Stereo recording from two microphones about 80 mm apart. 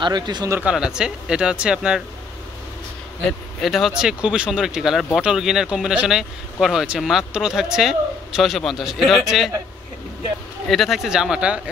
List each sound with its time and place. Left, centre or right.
0.0 s speech: right
0.6 s speech: centre
3.3 s speech: centre
10.7 s speech: centre